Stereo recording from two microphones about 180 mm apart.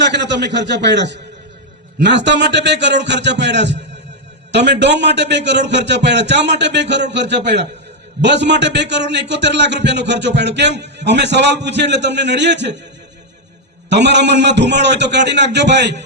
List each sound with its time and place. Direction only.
0.0 s a man's voice: 75° right (ahead or behind)
13.9 s a man's voice: 75° right (ahead or behind)